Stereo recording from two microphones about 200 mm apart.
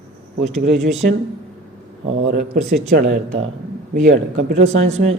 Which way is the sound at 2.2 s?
55° right (ahead or behind).